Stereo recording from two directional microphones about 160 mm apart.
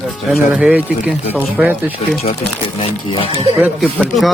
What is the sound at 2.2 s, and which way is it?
Speech, 35° left (ahead or behind).